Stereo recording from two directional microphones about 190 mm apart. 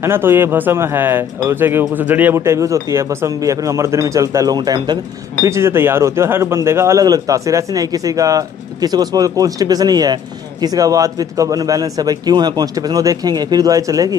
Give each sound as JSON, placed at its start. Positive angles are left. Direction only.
{"t": 0.0, "sound": "a man's voice", "side_deg": -10}